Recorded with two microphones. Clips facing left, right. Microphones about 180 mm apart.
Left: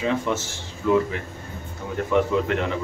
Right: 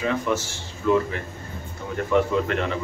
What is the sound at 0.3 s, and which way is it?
Speech, 20° left (ahead or behind).